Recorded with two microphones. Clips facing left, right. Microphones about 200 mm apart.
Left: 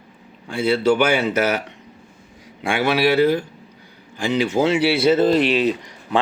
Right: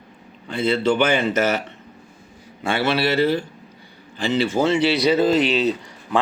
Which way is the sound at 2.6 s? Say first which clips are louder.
Left 2 dB; 10° left (ahead or behind).